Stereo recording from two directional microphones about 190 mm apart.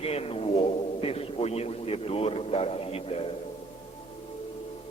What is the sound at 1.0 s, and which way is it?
A man's voice, 30° left (ahead or behind).